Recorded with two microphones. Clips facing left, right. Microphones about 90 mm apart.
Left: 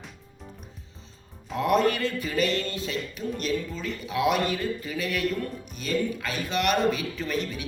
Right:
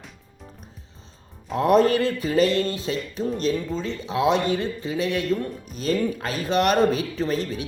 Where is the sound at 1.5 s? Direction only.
35° right (ahead or behind).